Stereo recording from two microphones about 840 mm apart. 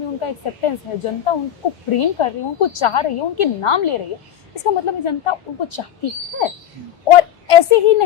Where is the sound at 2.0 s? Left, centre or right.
Left.